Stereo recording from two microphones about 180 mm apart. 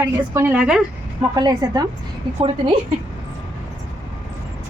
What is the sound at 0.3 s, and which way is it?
Speech, 10° right (ahead or behind).